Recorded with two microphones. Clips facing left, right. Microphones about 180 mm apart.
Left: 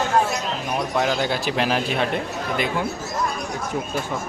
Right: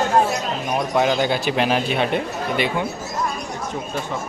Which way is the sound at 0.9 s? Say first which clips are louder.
Right 4 dB; centre (ahead or behind).